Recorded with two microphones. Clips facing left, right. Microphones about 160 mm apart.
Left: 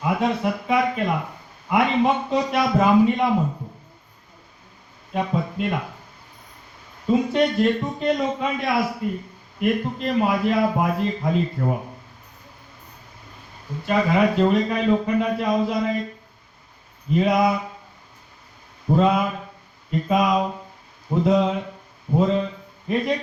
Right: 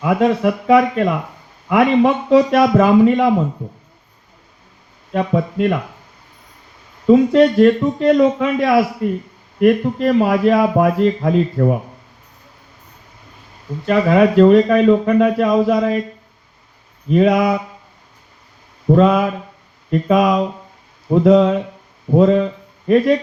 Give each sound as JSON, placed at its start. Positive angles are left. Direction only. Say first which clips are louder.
{"t": 0.0, "sound": "a man's voice", "louder": "right 7 dB", "side_deg": -65}
{"t": 5.1, "sound": "a man's voice", "louder": "right 6 dB", "side_deg": -70}
{"t": 7.1, "sound": "a man's voice", "louder": "right 9 dB", "side_deg": -75}
{"t": 9.6, "sound": "a man's voice", "louder": "right 9 dB", "side_deg": -65}
{"t": 13.8, "sound": "a man's voice", "louder": "right 6 dB", "side_deg": -70}
{"t": 17.1, "sound": "a man's voice", "louder": "right 5 dB", "side_deg": -65}
{"t": 18.9, "sound": "a man's voice", "louder": "right 6 dB", "side_deg": -70}